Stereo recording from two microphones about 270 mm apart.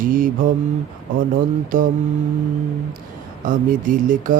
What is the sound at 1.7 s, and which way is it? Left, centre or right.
Speech, right.